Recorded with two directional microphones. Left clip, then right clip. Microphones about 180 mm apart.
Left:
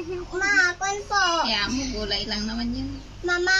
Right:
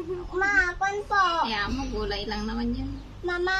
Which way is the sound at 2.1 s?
35° left (ahead or behind).